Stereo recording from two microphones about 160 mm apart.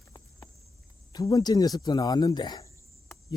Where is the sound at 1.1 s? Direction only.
25° left (ahead or behind).